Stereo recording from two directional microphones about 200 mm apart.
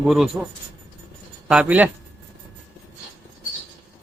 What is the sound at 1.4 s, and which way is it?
Speech, 5° right (ahead or behind).